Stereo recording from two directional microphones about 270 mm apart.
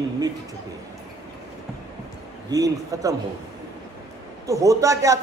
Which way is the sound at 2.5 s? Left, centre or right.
Centre.